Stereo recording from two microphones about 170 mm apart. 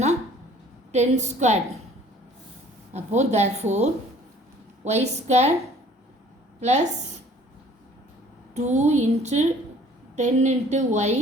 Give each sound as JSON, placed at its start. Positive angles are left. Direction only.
{"t": 0.9, "sound": "speech", "side_deg": -40}
{"t": 2.9, "sound": "speech", "side_deg": -40}
{"t": 6.6, "sound": "a woman's voice", "side_deg": -40}
{"t": 8.5, "sound": "speech", "side_deg": -45}